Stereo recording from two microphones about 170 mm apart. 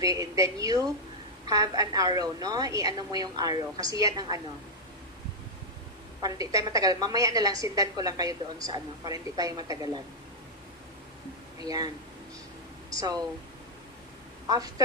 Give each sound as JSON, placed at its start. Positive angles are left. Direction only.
{"t": 0.0, "sound": "a woman's voice", "side_deg": -20}
{"t": 6.2, "sound": "a woman's voice", "side_deg": -20}
{"t": 11.6, "sound": "a woman's voice", "side_deg": -20}
{"t": 12.9, "sound": "speech", "side_deg": -20}
{"t": 14.4, "sound": "speech", "side_deg": -20}